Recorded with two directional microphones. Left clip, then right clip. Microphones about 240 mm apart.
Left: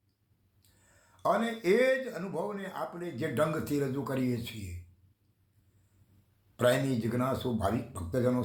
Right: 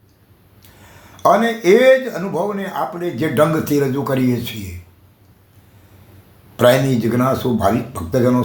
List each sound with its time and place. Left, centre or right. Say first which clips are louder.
1.1 s speech: right 16 dB; centre
6.6 s speech: right 14 dB; centre